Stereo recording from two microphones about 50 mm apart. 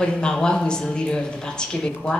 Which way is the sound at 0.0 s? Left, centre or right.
Centre.